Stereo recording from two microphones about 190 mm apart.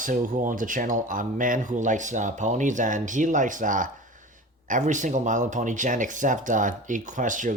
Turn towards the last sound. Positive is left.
turn(degrees=-45)  # may be behind; listen again after turning